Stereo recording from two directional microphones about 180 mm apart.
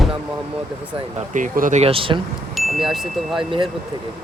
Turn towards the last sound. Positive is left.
turn(degrees=0)  # may be behind; listen again after turning